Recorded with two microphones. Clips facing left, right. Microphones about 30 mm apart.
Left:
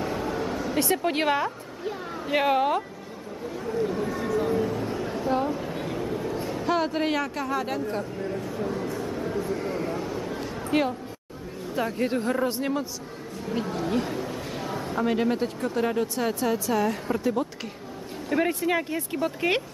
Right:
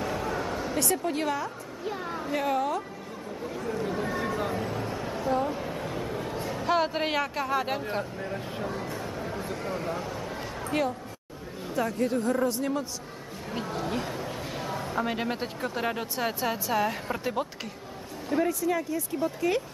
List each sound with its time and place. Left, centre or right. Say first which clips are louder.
0.0 s a sound: left 2 dB; centre
0.7 s a woman's voice: left 4 dB; left
1.9 s speech: even; centre
2.2 s a woman's voice: left 6 dB; left
3.4 s chatter: left 4 dB; centre
4.5 s a sound: left 5 dB; centre
6.4 s speech: right 1 dB; centre
8.9 s a sound: left 5 dB; centre
10.7 s a woman's voice: left 4 dB; centre
12.0 s a woman's voice: left 1 dB; left
13.5 s a man's voice: left 4 dB; centre
18.4 s speech: left 2 dB; left